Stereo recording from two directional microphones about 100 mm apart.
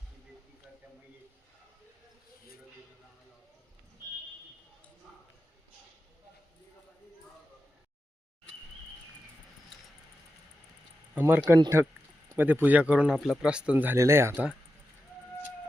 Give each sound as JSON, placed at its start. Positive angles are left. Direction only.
{"t": 11.1, "sound": "speech", "side_deg": -20}
{"t": 13.1, "sound": "speech", "side_deg": 0}
{"t": 13.9, "sound": "speech", "side_deg": -25}